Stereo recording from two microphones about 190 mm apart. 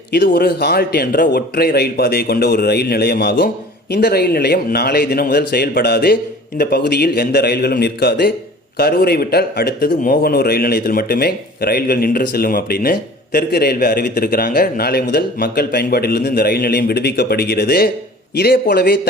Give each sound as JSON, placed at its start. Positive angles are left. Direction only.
{"t": 0.1, "sound": "a man's voice", "side_deg": 55}